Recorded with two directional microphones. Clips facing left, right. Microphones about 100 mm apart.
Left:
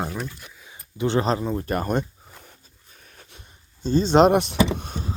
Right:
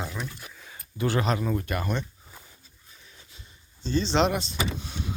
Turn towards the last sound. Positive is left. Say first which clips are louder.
# left 8 dB
turn(degrees=45)  # may be behind; listen again after turning